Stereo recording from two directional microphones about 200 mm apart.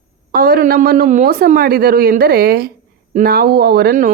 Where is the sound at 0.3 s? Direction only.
50° right (ahead or behind).